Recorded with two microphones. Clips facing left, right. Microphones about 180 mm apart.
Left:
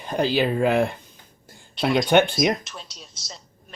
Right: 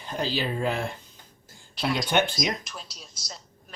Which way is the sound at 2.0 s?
60° left (ahead or behind).